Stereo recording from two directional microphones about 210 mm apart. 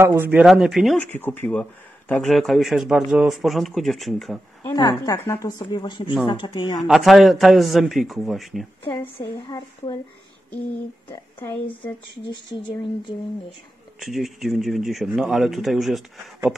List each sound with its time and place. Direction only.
0.0 s speech: 10° right (ahead or behind)
4.6 s a woman's voice: 20° left (ahead or behind)
6.9 s speech: centre (ahead or behind)
9.0 s speech: 20° left (ahead or behind)
11.3 s speech: 10° left (ahead or behind)
12.3 s a woman's voice: 20° left (ahead or behind)
13.9 s speech: centre (ahead or behind)